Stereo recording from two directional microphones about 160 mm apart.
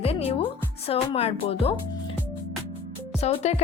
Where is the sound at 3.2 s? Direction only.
40° left (ahead or behind).